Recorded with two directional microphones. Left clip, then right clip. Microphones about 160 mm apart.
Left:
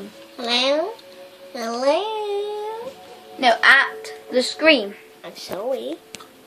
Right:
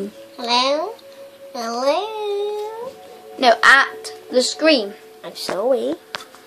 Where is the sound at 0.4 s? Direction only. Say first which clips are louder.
Right 2 dB; 5° left (ahead or behind).